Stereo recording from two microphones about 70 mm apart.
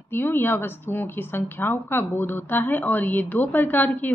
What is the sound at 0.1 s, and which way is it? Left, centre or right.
Speech, left.